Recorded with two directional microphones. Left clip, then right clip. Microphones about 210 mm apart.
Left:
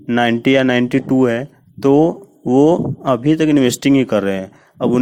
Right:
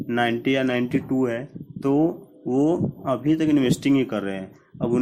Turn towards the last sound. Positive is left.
turn(degrees=40)  # may be behind; listen again after turning